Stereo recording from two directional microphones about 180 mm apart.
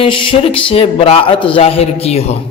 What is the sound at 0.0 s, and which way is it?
A man's voice, 30° left (ahead or behind).